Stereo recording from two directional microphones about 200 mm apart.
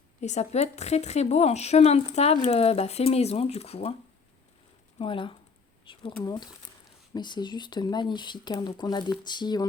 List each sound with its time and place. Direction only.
0.2 s a woman's voice: 35° left (ahead or behind)
4.9 s speech: 25° left (ahead or behind)
5.8 s a sound: 25° left (ahead or behind)
6.2 s speech: 20° left (ahead or behind)